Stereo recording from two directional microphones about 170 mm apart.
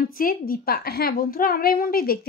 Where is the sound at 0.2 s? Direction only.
60° left (ahead or behind).